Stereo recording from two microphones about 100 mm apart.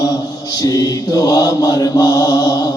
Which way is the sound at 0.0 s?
40° left (ahead or behind).